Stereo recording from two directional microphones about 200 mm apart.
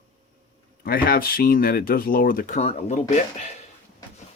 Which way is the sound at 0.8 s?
45° left (ahead or behind).